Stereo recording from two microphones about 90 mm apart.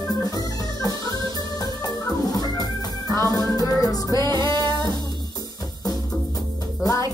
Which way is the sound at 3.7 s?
45° left (ahead or behind).